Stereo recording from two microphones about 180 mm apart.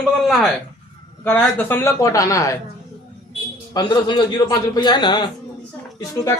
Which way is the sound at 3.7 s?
25° left (ahead or behind).